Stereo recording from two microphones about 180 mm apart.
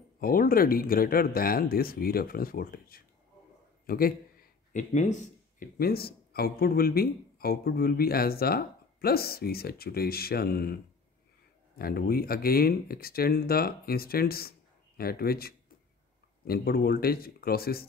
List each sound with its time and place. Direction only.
0.2 s speech: 55° left (ahead or behind)
3.8 s a sound: 55° left (ahead or behind)
5.8 s speech: 60° left (ahead or behind)